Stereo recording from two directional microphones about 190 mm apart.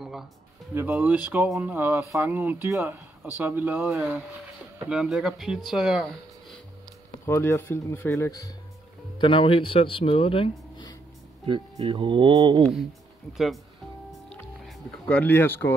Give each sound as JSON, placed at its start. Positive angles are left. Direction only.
{"t": 0.7, "sound": "speech", "side_deg": -10}
{"t": 7.2, "sound": "speech", "side_deg": 15}
{"t": 9.2, "sound": "speech", "side_deg": 25}
{"t": 11.4, "sound": "speech", "side_deg": -25}
{"t": 13.3, "sound": "speech", "side_deg": 0}
{"t": 14.3, "sound": "music", "side_deg": 5}